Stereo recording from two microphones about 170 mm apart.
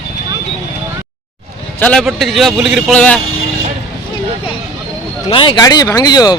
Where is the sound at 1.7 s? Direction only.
10° left (ahead or behind).